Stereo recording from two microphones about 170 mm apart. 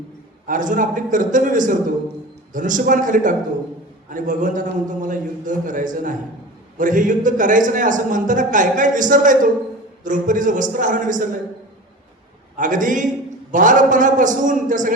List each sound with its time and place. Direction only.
0.4 s a man's voice: 50° right (ahead or behind)
12.5 s a man's voice: 50° right (ahead or behind)